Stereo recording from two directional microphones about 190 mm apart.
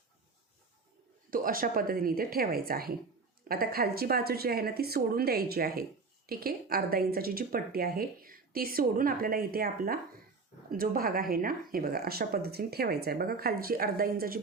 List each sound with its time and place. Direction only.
1.3 s a woman's voice: 50° right (ahead or behind)